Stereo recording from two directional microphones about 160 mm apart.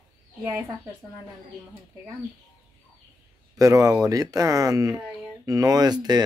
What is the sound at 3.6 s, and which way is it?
Speech, 20° right (ahead or behind).